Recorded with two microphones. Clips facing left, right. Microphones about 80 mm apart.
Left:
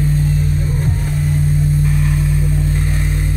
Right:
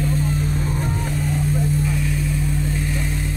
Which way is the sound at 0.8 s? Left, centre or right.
Centre.